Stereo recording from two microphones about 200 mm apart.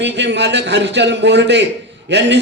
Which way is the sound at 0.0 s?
60° right (ahead or behind).